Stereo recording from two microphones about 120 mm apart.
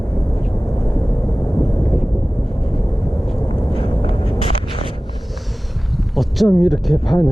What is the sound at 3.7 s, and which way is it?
Vehicle, 45° left (ahead or behind).